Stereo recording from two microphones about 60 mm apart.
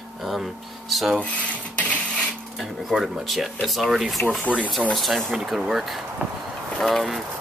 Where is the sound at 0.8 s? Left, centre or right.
Centre.